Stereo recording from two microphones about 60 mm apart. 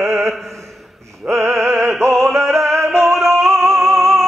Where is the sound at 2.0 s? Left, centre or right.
Right.